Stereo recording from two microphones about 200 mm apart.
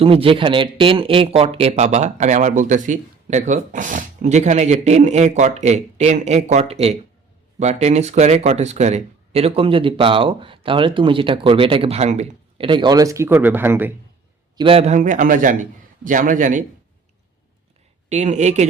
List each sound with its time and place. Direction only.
0.0 s speech: 25° right (ahead or behind); by 13.9 s 10° right (ahead or behind)
14.6 s speech: 30° right (ahead or behind)
18.1 s speech: 35° right (ahead or behind)